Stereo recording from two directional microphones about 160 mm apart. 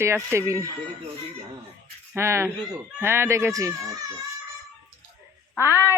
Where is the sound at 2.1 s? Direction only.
15° right (ahead or behind).